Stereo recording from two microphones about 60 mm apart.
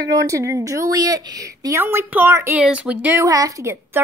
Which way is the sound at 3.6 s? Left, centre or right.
Right.